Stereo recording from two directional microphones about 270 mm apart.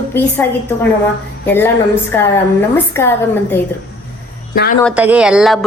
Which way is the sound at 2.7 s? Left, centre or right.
Centre.